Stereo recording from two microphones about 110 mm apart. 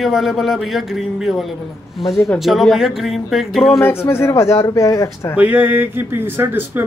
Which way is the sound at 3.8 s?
20° left (ahead or behind).